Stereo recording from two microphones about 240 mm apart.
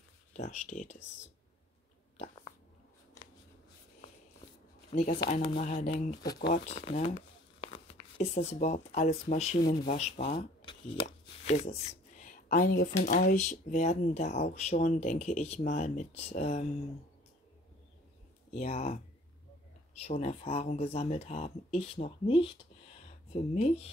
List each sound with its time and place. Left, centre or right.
0.3 s speech: left
4.9 s speech: left
18.5 s speech: left